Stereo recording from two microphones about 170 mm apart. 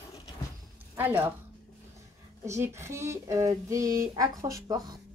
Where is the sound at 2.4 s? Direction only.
15° right (ahead or behind).